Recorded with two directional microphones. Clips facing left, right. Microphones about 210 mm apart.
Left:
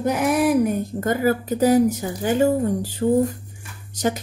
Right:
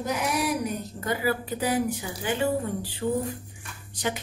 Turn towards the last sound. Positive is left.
turn(degrees=45)  # may be behind; listen again after turning